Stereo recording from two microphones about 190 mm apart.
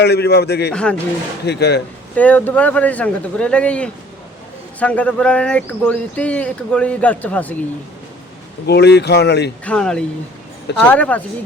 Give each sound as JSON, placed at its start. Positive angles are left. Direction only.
{"t": 0.0, "sound": "speech", "side_deg": 60}
{"t": 0.7, "sound": "speech", "side_deg": 5}
{"t": 1.5, "sound": "speech", "side_deg": 60}
{"t": 2.1, "sound": "speech", "side_deg": 10}
{"t": 8.6, "sound": "speech", "side_deg": 60}
{"t": 9.6, "sound": "speech", "side_deg": 5}